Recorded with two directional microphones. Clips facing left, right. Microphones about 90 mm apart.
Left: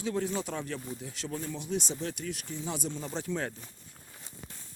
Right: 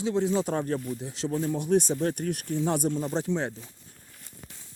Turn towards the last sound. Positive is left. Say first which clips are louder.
# right 6 dB
turn(degrees=-25)  # may be behind; listen again after turning